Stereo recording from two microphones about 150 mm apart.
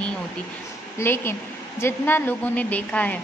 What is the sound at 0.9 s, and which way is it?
A woman's voice, 15° left (ahead or behind).